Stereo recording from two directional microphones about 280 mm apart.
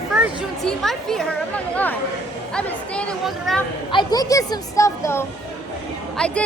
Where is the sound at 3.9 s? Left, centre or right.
Centre.